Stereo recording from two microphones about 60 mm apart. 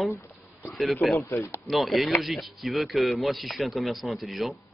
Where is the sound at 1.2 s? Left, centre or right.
Left.